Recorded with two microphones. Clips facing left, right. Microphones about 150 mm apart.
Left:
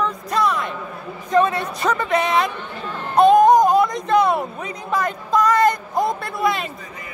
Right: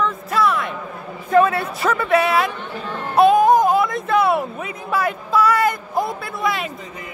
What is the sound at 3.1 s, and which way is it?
Music, 5° right (ahead or behind).